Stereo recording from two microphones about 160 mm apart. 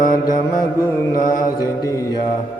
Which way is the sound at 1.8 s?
20° left (ahead or behind).